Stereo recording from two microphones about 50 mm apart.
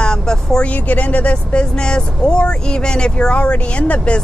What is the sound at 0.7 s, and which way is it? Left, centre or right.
Speech, left.